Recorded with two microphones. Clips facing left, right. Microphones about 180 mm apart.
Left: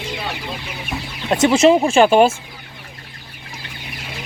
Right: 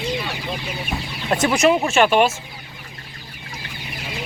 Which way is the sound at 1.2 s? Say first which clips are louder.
Left 4 dB; 20° left (ahead or behind).